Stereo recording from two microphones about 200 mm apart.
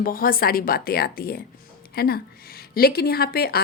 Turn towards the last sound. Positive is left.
turn(degrees=50)  # may be behind; listen again after turning